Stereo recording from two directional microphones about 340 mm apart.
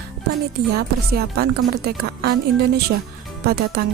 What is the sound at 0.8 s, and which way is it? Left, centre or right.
A woman's voice, right.